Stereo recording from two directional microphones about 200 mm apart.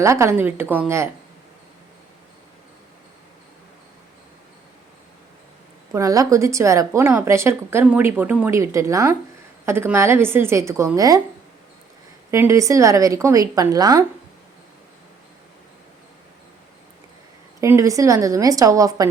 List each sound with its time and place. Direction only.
0.0 s a woman's voice: 15° right (ahead or behind)
5.9 s a woman's voice: 15° right (ahead or behind)
12.3 s a woman's voice: 15° right (ahead or behind)
17.6 s a woman's voice: 15° right (ahead or behind)